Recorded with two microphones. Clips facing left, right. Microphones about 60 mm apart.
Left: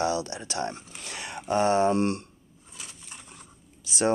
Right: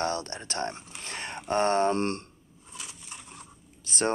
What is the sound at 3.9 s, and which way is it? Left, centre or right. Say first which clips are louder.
Speech: left 3 dB; right.